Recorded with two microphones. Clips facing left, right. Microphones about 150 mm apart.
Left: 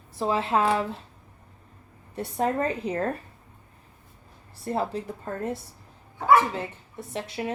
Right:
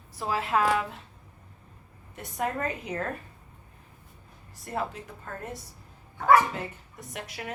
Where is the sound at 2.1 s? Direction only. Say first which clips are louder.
Left 5 dB; 30° left (ahead or behind).